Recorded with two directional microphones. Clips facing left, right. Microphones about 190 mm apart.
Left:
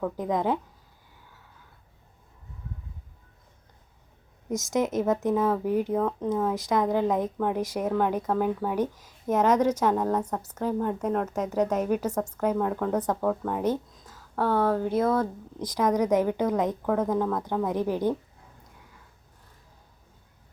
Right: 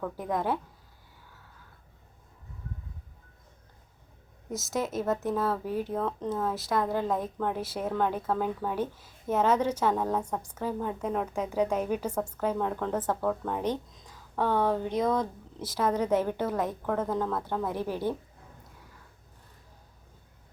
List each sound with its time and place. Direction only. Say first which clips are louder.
0.2 s a woman's voice: left 3 dB; 15° left (ahead or behind)
4.5 s a woman's voice: left 5 dB; 15° left (ahead or behind)
10.1 s a woman's voice: left 3 dB; 10° right (ahead or behind)
11.8 s a woman's voice: left 3 dB; 10° left (ahead or behind)